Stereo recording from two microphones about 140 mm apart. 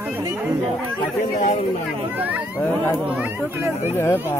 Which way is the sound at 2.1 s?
10° right (ahead or behind).